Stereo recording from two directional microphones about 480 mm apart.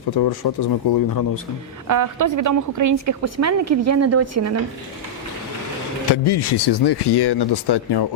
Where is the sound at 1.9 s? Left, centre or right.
Right.